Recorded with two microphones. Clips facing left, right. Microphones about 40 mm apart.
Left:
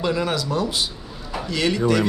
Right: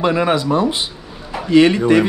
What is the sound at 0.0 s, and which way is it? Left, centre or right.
Speech, right.